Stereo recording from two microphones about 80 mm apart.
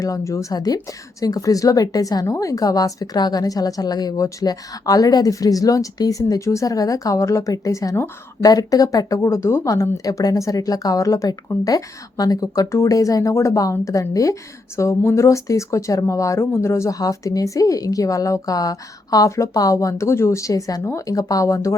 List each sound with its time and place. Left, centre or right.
0.0 s speech: left
17.0 s speech: left